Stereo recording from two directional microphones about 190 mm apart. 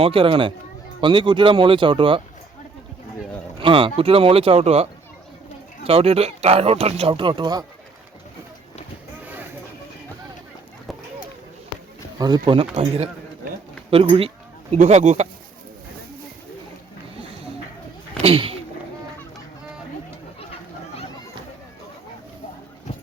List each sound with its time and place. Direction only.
0.0 s speech: 25° right (ahead or behind)
3.6 s speech: 25° right (ahead or behind)
12.2 s speech: 25° right (ahead or behind)
13.9 s a sound: 30° right (ahead or behind)
14.8 s speech: 35° right (ahead or behind)
18.2 s speech: 30° right (ahead or behind)